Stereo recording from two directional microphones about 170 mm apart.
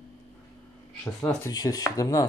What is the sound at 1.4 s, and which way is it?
Chopping, 20° left (ahead or behind).